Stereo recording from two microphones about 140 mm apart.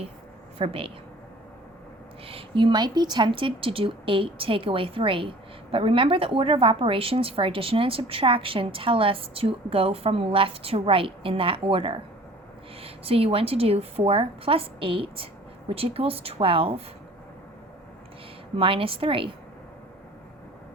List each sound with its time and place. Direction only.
0.6 s a woman's voice: 40° right (ahead or behind)
2.2 s a woman's voice: 40° right (ahead or behind)
18.5 s a woman's voice: 40° right (ahead or behind)